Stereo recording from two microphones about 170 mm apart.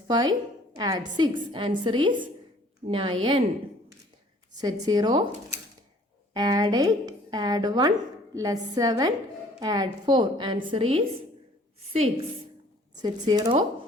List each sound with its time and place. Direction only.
0.1 s a woman's voice: 25° right (ahead or behind)
4.5 s speech: 25° right (ahead or behind)
6.3 s speech: 25° right (ahead or behind)
13.0 s speech: 25° right (ahead or behind)